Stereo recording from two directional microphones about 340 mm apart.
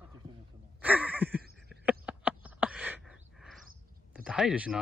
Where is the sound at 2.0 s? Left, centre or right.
Centre.